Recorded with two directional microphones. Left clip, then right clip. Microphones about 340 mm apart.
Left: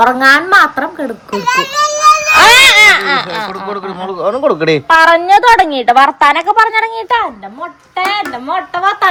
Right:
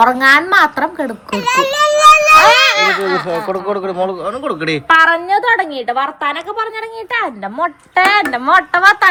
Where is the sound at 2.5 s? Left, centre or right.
Left.